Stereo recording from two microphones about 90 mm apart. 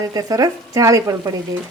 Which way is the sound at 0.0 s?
45° right (ahead or behind).